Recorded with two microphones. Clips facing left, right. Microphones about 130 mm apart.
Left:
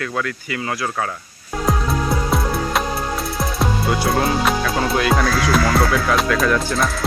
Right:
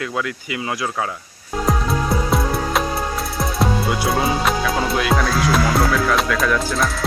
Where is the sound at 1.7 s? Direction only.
Centre (ahead or behind).